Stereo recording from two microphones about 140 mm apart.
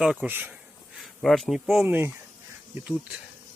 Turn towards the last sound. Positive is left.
turn(degrees=-10)  # may be behind; listen again after turning